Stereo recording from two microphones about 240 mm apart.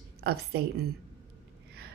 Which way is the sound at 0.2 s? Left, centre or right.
Right.